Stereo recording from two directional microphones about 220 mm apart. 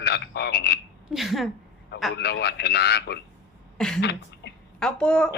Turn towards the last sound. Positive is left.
turn(degrees=5)  # may be behind; listen again after turning